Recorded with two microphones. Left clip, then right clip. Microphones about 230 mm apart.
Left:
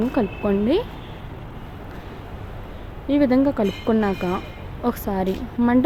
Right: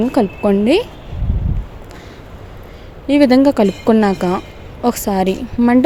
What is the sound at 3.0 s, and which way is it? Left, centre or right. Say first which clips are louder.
Speech: right 8 dB; right.